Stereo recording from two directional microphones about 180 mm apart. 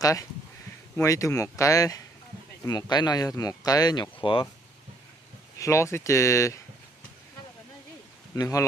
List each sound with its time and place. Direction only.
0.0 s speech: 20° left (ahead or behind)
5.6 s speech: 15° left (ahead or behind)
8.4 s speech: 15° left (ahead or behind)